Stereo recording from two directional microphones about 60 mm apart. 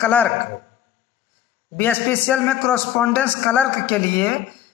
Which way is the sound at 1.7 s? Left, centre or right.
Left.